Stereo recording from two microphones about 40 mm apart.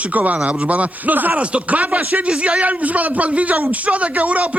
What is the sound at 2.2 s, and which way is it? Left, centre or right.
A man's voice, right.